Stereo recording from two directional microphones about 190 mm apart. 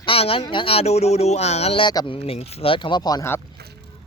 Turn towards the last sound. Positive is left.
turn(degrees=15)  # may be behind; listen again after turning